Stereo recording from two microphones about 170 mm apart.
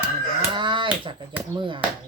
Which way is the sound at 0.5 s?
30° right (ahead or behind).